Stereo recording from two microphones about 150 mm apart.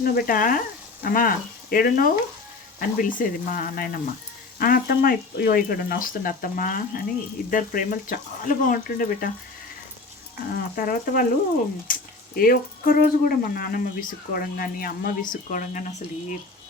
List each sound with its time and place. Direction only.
0.0 s speech: 70° left (ahead or behind)
10.5 s speech: 70° left (ahead or behind)
11.9 s a sound: 65° left (ahead or behind)
12.4 s speech: 70° left (ahead or behind)